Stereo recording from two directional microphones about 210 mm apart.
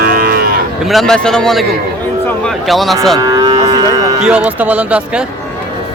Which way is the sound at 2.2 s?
Centre (ahead or behind).